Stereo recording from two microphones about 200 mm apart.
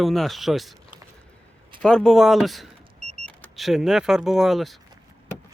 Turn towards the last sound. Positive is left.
turn(degrees=0)  # may be behind; listen again after turning